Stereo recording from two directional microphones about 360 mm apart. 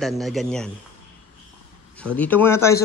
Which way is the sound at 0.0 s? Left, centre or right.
Centre.